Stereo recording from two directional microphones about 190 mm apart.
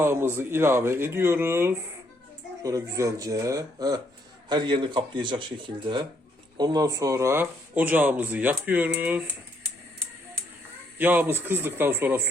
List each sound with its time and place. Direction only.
0.0 s speech: 10° right (ahead or behind)
10.9 s speech: 10° right (ahead or behind)